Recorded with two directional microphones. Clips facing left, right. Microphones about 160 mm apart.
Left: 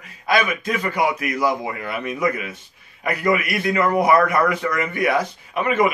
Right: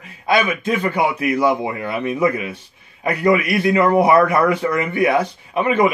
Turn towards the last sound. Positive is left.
turn(degrees=-25)  # may be behind; listen again after turning